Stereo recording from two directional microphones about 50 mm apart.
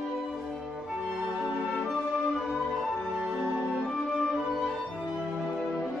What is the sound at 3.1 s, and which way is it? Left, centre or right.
Music, centre.